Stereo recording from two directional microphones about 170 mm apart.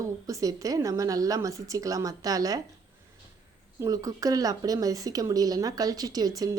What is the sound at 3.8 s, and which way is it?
Speech, 20° right (ahead or behind).